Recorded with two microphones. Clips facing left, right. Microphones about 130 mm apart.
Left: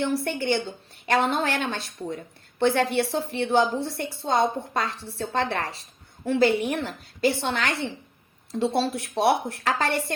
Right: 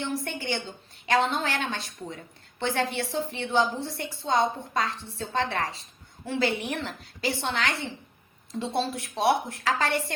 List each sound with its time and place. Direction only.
0.0 s a woman's voice: 60° left (ahead or behind)
8.5 s a woman's voice: 65° left (ahead or behind)